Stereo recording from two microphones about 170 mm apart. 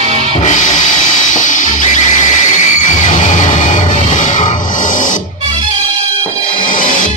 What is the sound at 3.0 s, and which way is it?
Music, 50° left (ahead or behind).